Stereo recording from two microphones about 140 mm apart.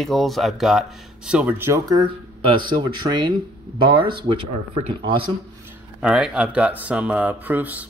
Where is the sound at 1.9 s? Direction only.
35° right (ahead or behind).